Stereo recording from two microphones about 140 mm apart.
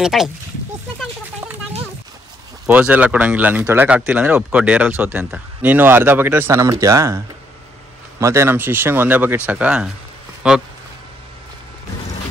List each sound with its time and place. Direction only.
0.0 s speech: 5° right (ahead or behind)
2.6 s speech: 10° right (ahead or behind)